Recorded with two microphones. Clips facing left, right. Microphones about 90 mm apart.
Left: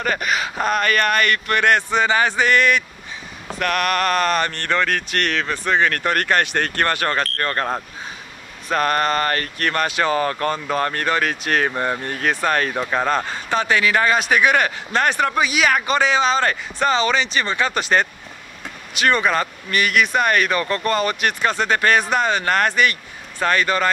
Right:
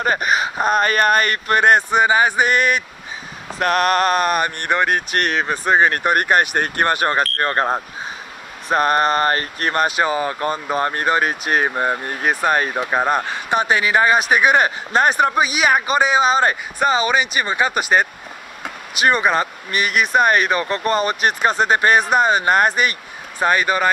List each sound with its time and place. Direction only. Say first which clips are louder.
0.0 s speech: right 3 dB; 35° right (ahead or behind)
1.9 s a man's voice: right 3 dB; 15° right (ahead or behind)
3.5 s speech: right 4 dB; 35° right (ahead or behind)
4.1 s a man's voice: right 1 dB; 15° right (ahead or behind)
9.8 s a man's voice: even; 15° right (ahead or behind)
21.1 s speech: right 2 dB; 40° right (ahead or behind)
21.6 s a man's voice: right 1 dB; 20° right (ahead or behind)